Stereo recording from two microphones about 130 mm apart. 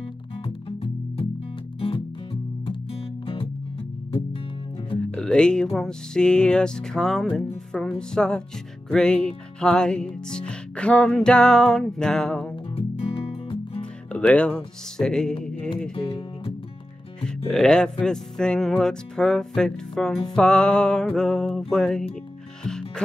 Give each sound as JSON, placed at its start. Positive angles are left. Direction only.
{"t": 0.7, "sound": "music", "side_deg": 45}
{"t": 2.6, "sound": "music", "side_deg": 45}
{"t": 5.1, "sound": "music", "side_deg": 5}
{"t": 12.7, "sound": "music", "side_deg": 45}
{"t": 14.1, "sound": "speech", "side_deg": 10}
{"t": 15.4, "sound": "music", "side_deg": 10}
{"t": 16.0, "sound": "speech", "side_deg": 40}
{"t": 17.5, "sound": "music", "side_deg": 5}